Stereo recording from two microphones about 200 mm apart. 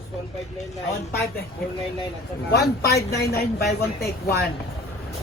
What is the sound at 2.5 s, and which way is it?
Speech, 50° left (ahead or behind).